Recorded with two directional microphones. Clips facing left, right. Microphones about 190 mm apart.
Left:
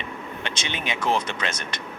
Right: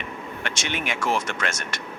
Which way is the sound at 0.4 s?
20° left (ahead or behind).